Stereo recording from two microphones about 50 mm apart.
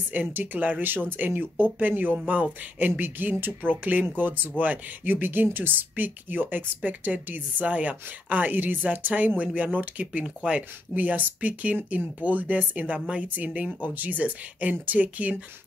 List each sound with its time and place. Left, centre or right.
0.1 s speech: right
2.1 s speech: right
11.0 s speech: right